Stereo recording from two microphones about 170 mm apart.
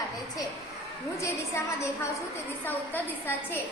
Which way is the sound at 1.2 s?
15° left (ahead or behind).